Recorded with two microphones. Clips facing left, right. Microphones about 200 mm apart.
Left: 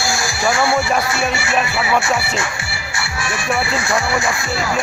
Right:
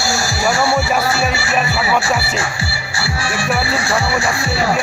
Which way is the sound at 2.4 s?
35° right (ahead or behind).